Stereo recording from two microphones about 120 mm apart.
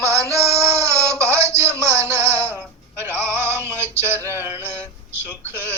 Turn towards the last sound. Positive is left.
turn(degrees=-20)  # may be behind; listen again after turning